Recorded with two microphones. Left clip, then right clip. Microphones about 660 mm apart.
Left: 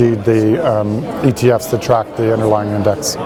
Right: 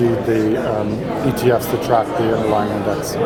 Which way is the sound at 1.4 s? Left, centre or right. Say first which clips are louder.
Left 3 dB; left.